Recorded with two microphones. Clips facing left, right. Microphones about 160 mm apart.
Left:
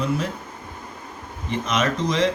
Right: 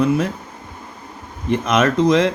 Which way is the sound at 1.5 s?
55° right (ahead or behind).